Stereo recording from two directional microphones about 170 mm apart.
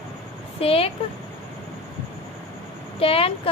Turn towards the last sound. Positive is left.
turn(degrees=35)  # may be behind; listen again after turning